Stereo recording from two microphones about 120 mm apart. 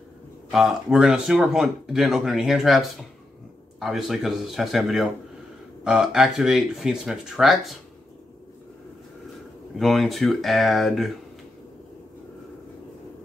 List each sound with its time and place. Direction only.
0.5 s speech: centre (ahead or behind)
3.8 s speech: centre (ahead or behind)
9.8 s speech: centre (ahead or behind)